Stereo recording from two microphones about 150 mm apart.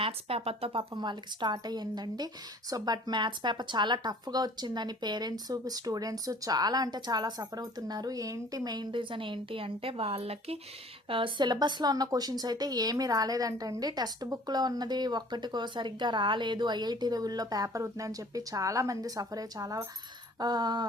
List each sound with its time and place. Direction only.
0.0 s speech: 40° right (ahead or behind)